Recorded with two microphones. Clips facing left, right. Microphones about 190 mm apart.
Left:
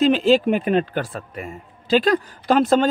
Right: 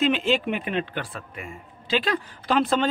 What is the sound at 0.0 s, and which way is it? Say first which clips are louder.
A man's voice: left 7 dB; 35° left (ahead or behind).